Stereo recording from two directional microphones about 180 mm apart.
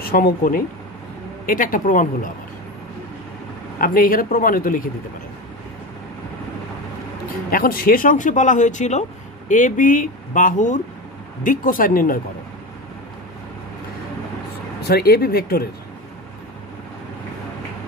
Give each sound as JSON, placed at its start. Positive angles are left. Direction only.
{"t": 0.0, "sound": "speech", "side_deg": 55}
{"t": 3.7, "sound": "speech", "side_deg": 50}
{"t": 7.5, "sound": "speech", "side_deg": 55}
{"t": 14.8, "sound": "speech", "side_deg": 60}